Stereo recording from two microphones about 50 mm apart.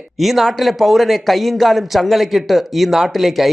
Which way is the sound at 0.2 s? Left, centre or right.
Centre.